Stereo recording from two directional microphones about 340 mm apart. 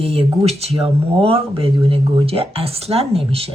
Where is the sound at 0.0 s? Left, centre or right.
Centre.